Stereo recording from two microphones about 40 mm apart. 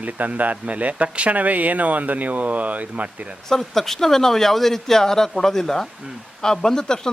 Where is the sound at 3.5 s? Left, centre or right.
Centre.